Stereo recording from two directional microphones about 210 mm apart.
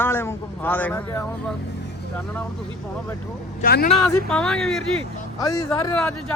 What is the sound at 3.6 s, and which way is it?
Speech, 50° left (ahead or behind).